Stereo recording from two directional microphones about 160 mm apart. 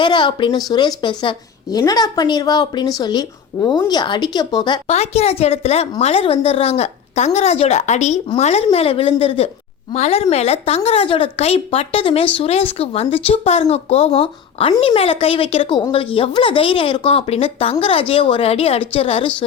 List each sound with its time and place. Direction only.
0.0 s a woman's voice: 30° left (ahead or behind)
4.9 s a woman's voice: 40° left (ahead or behind)